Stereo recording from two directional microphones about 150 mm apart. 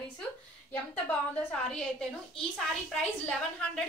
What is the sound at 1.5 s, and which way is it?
A woman's voice, 5° left (ahead or behind).